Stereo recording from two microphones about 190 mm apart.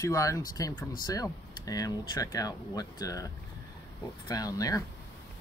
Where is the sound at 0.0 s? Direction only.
15° left (ahead or behind).